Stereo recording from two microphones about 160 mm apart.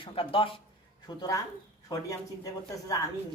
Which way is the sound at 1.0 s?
25° left (ahead or behind).